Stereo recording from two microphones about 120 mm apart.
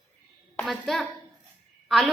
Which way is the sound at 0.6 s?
Centre (ahead or behind).